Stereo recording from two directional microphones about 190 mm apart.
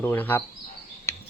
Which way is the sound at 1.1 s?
15° left (ahead or behind).